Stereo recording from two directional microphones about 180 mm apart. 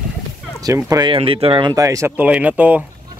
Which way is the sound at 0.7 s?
20° right (ahead or behind).